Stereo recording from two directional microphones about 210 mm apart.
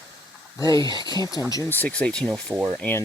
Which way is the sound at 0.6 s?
15° left (ahead or behind).